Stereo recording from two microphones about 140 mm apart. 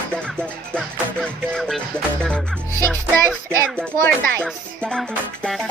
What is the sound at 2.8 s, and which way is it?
Speech, 15° left (ahead or behind).